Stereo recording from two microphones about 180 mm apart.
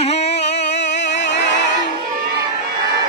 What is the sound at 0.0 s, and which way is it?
Music, 35° left (ahead or behind).